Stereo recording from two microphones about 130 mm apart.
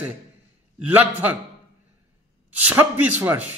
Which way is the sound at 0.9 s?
15° right (ahead or behind).